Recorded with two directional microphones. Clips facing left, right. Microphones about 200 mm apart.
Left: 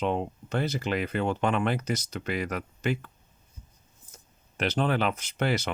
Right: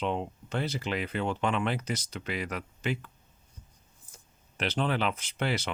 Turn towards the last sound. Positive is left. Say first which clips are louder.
# left 3 dB
turn(degrees=45)  # may be behind; listen again after turning